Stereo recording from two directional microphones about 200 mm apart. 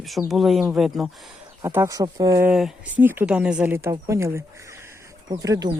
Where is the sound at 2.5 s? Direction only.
5° right (ahead or behind).